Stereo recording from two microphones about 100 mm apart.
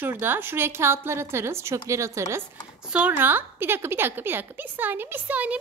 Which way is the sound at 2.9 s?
15° right (ahead or behind).